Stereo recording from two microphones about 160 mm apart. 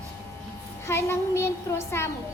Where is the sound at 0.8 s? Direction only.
15° left (ahead or behind).